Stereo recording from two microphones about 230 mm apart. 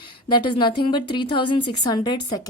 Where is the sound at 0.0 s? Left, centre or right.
Centre.